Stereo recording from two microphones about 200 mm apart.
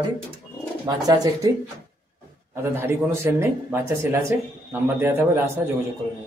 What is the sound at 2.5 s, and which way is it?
Speech, 10° right (ahead or behind).